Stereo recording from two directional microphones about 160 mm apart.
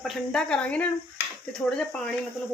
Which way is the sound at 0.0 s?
Centre (ahead or behind).